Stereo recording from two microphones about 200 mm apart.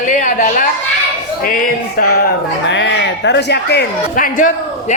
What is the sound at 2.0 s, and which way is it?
Speech, 45° left (ahead or behind).